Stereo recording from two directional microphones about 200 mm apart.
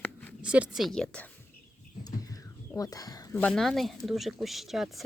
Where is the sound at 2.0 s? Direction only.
15° left (ahead or behind).